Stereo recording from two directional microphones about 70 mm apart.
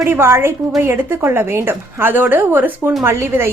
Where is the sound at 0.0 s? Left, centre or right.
Right.